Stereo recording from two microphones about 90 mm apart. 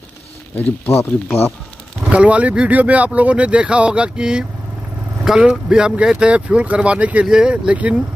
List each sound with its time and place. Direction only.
0.8 s speech: 25° left (ahead or behind)
2.0 s speech: 15° right (ahead or behind)